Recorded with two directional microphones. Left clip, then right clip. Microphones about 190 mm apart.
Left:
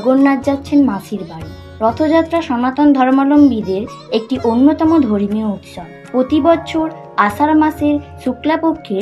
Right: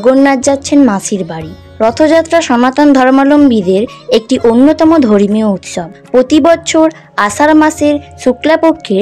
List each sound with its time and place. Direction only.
0.1 s speech: 65° right (ahead or behind)